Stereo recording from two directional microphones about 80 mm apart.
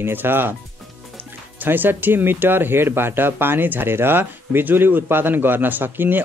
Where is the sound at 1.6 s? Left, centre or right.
Right.